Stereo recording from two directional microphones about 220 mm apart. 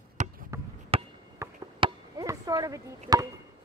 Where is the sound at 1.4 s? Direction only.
20° right (ahead or behind).